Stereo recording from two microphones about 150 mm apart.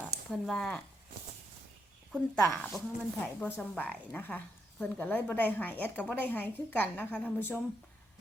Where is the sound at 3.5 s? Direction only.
10° left (ahead or behind).